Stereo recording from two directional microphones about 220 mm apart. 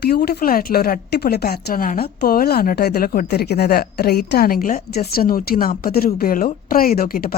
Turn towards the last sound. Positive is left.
turn(degrees=40)  # may be behind; listen again after turning